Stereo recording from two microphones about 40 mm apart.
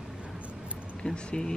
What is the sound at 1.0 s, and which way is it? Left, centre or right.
Speech, centre.